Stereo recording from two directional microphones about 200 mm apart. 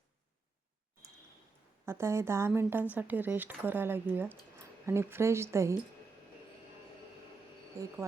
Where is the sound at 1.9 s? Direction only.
15° right (ahead or behind).